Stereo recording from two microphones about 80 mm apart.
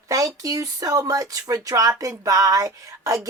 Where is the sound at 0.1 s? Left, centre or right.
Right.